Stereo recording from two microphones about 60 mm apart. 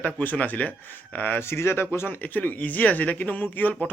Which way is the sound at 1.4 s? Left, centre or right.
Left.